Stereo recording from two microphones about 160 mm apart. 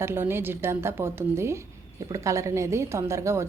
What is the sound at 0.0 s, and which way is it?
Speech, 15° right (ahead or behind).